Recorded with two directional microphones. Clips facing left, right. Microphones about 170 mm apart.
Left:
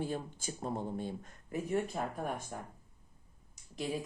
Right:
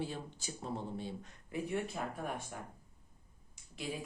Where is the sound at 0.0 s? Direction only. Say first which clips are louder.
Left 4 dB; 50° left (ahead or behind).